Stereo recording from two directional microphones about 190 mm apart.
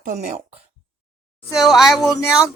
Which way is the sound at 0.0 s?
45° right (ahead or behind).